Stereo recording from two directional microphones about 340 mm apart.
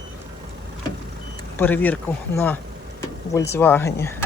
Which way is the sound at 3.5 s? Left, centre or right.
Centre.